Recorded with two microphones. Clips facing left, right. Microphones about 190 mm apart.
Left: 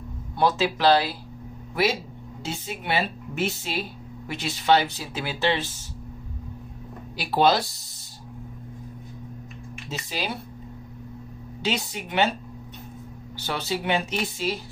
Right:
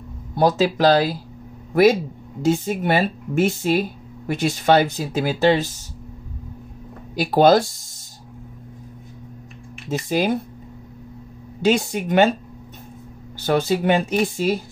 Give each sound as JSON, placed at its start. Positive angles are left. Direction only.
{"t": 0.4, "sound": "a man's voice", "side_deg": -40}
{"t": 7.2, "sound": "speech", "side_deg": -45}
{"t": 9.8, "sound": "speech", "side_deg": -50}
{"t": 11.6, "sound": "speech", "side_deg": -45}
{"t": 13.4, "sound": "speech", "side_deg": -50}